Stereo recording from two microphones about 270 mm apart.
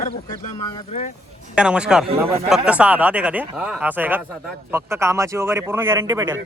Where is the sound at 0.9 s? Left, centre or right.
Left.